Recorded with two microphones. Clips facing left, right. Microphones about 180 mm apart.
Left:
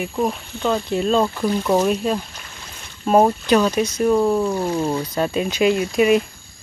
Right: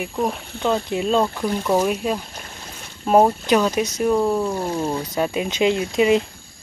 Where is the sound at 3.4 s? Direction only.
15° right (ahead or behind).